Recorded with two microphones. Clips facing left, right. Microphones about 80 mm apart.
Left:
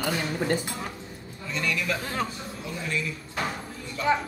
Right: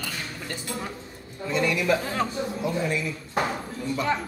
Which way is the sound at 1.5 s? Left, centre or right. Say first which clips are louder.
Right 5 dB; right.